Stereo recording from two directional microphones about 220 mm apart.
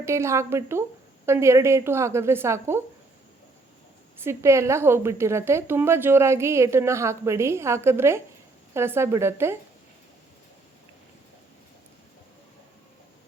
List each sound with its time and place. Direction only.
0.0 s a woman's voice: 10° right (ahead or behind)
4.2 s a woman's voice: 10° right (ahead or behind)